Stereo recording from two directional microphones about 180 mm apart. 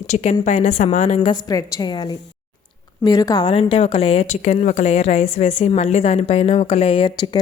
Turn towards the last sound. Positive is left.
turn(degrees=30)  # may be behind; listen again after turning